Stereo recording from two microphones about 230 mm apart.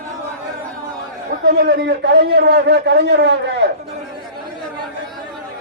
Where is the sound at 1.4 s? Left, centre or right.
Right.